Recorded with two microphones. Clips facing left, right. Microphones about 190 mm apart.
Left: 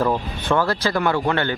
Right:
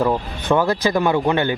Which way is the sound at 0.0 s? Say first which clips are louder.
Right 2 dB; 15° right (ahead or behind).